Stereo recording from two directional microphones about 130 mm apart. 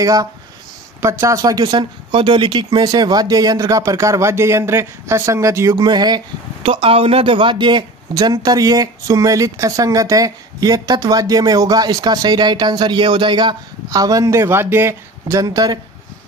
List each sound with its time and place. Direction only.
0.0 s speech: 30° right (ahead or behind)
6.6 s speech: 45° right (ahead or behind); by 15.8 s 30° right (ahead or behind)